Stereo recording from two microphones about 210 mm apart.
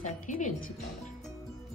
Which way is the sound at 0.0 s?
35° left (ahead or behind).